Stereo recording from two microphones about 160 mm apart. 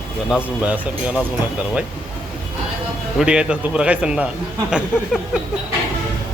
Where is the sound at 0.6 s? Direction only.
10° right (ahead or behind).